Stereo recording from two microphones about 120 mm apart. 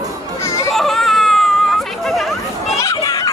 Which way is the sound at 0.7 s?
Centre (ahead or behind).